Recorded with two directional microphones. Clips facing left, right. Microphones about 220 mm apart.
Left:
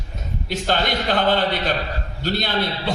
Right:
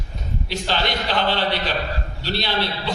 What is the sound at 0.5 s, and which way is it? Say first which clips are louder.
A man's voice: left 3 dB; 50° left (ahead or behind).